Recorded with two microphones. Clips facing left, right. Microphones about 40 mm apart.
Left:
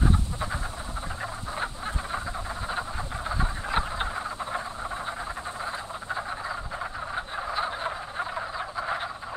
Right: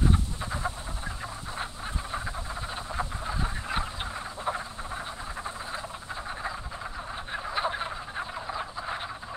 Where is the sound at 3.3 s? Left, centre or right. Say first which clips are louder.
Left 3 dB; centre.